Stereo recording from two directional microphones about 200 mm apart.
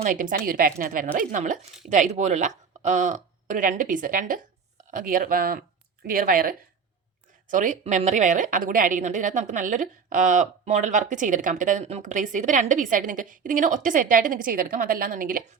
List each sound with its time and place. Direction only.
0.0 s a woman's voice: 45° right (ahead or behind)